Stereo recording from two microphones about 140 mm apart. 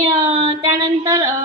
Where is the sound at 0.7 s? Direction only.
25° right (ahead or behind).